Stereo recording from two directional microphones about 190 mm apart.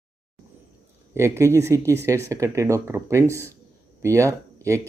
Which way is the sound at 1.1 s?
15° right (ahead or behind).